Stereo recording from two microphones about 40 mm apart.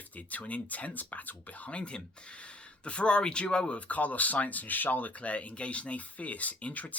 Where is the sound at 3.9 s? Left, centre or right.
Left.